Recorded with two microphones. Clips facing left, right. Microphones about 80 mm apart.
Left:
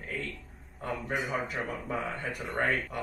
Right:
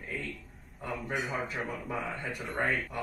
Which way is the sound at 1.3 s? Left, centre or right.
Centre.